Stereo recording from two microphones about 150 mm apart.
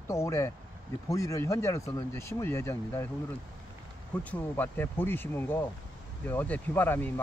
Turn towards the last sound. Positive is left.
turn(degrees=15)  # may be behind; listen again after turning